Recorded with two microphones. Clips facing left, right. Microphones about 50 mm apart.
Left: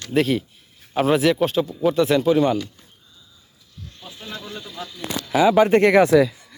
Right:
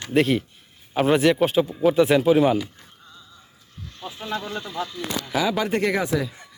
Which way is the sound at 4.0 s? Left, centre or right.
Centre.